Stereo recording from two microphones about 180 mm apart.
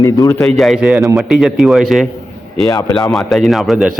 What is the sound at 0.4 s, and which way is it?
A man's voice, centre (ahead or behind).